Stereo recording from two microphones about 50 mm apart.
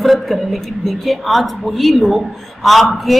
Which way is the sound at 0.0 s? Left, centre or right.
Centre.